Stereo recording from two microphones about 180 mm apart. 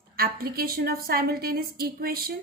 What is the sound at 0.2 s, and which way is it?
A woman's voice, 55° right (ahead or behind).